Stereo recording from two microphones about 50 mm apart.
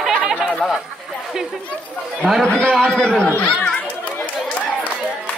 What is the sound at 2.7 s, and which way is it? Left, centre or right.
Speech, centre.